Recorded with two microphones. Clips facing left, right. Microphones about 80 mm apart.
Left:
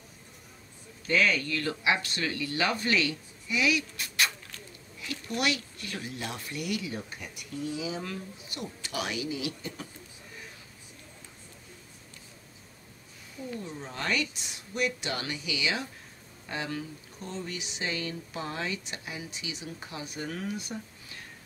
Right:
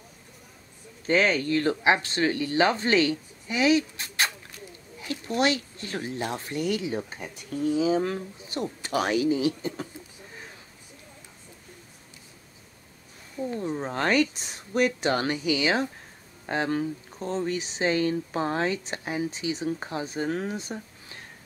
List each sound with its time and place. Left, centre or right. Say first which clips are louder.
1.0 s speech: right 4 dB; right
13.5 s speech: right 8 dB; right